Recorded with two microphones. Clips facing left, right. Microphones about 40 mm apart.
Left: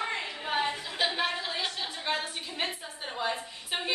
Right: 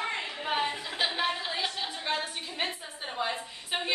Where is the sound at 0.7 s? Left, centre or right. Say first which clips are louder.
Left 1 dB; centre.